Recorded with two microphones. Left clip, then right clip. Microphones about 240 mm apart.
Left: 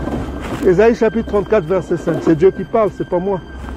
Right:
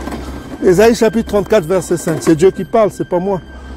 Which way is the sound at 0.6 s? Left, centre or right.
Right.